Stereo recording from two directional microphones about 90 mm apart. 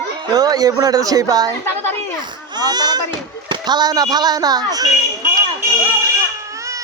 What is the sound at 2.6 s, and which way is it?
Speech, 50° right (ahead or behind).